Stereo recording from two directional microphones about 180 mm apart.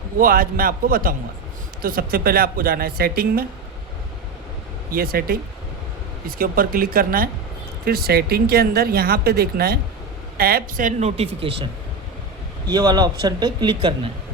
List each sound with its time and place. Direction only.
0.2 s a woman's voice: 50° right (ahead or behind)
4.9 s a woman's voice: 55° right (ahead or behind); by 14.1 s 25° right (ahead or behind)